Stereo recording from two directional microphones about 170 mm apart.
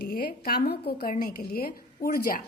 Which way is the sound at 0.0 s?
60° left (ahead or behind).